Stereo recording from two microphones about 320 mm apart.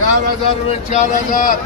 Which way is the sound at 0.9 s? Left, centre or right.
Left.